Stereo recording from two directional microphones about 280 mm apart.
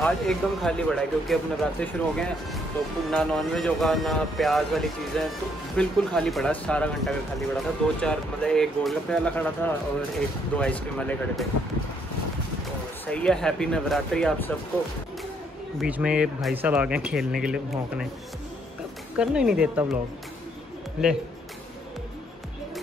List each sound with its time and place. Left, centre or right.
0.0 s speech: centre
13.0 s speech: centre
15.8 s speech: centre
19.1 s speech: centre
21.0 s speech: centre